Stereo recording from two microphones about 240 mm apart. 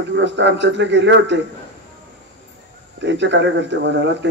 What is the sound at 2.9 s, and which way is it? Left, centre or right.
Speech, right.